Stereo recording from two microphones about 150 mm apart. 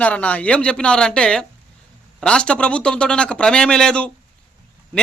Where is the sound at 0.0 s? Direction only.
10° left (ahead or behind).